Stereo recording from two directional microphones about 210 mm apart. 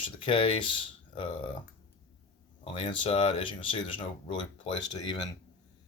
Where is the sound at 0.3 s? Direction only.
25° left (ahead or behind).